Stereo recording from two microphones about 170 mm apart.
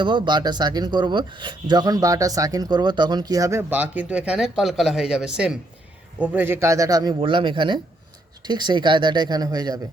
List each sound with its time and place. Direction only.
0.0 s speech: 25° right (ahead or behind)